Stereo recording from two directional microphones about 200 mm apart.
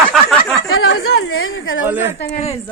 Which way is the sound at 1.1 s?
90° left.